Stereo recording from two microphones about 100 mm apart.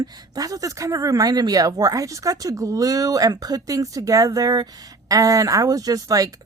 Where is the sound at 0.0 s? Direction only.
40° right (ahead or behind).